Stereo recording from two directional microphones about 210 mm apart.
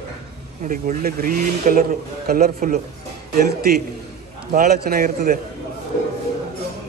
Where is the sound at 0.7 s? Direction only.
40° right (ahead or behind).